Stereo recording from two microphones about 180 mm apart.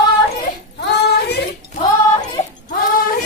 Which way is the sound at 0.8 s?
65° left (ahead or behind).